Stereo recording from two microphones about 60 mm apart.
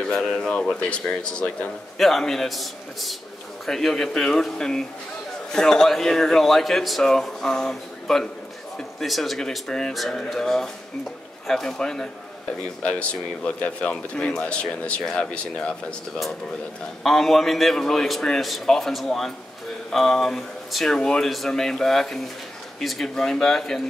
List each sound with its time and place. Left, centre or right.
0.0 s a man's voice: centre
9.7 s speech: centre
9.9 s speech: centre
17.0 s a man's voice: centre